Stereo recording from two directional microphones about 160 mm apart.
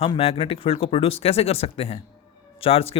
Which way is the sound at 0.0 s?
35° left (ahead or behind).